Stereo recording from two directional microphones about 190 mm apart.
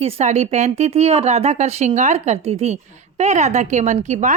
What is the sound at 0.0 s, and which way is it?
A woman's voice, 35° right (ahead or behind).